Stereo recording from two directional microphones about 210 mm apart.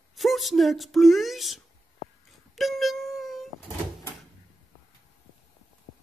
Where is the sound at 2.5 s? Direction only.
Centre (ahead or behind).